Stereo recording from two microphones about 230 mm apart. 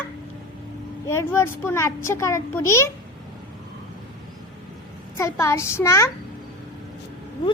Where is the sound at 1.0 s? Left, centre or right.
Centre.